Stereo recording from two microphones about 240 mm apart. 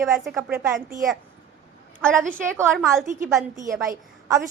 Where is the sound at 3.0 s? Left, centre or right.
Right.